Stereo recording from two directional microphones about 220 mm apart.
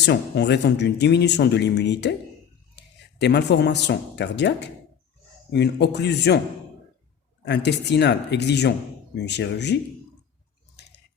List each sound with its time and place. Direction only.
0.0 s speech: 50° left (ahead or behind)
7.4 s speech: 50° left (ahead or behind)